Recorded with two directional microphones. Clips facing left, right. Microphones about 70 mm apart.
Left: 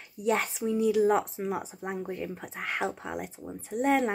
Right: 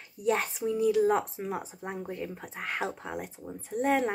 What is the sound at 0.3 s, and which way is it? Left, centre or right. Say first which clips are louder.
Speech: left 1 dB; centre.